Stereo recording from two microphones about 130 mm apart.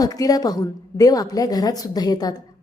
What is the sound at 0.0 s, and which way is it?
A woman's voice, 30° left (ahead or behind).